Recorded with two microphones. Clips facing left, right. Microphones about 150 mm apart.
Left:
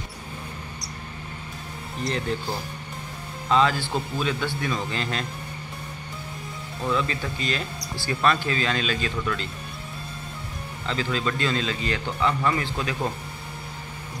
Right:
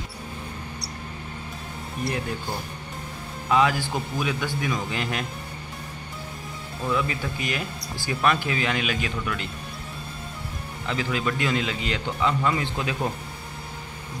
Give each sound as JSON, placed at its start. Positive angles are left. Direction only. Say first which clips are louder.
{"t": 3.4, "sound": "speech", "louder": "even", "side_deg": -10}
{"t": 6.9, "sound": "speech", "louder": "even", "side_deg": -15}
{"t": 10.9, "sound": "speech", "louder": "even", "side_deg": -15}